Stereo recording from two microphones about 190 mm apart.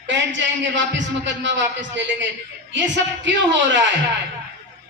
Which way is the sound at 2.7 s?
70° right (ahead or behind).